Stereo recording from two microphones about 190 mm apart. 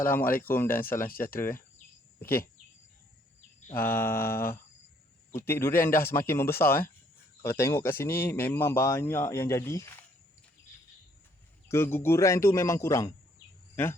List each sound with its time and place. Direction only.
0.4 s speech: 10° left (ahead or behind)
1.1 s speech: 50° left (ahead or behind)
3.8 s speech: 10° left (ahead or behind)
11.7 s speech: 10° left (ahead or behind)